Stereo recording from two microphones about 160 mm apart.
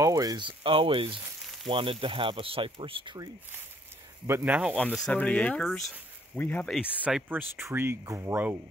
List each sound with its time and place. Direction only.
0.0 s speech: 20° right (ahead or behind)
4.3 s speech: 10° right (ahead or behind)
4.7 s speech: 5° left (ahead or behind)
7.0 s speech: 5° right (ahead or behind)